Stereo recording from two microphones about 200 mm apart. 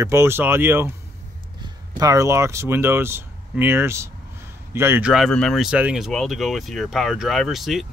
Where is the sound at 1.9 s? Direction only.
15° right (ahead or behind); by 7.9 s centre (ahead or behind).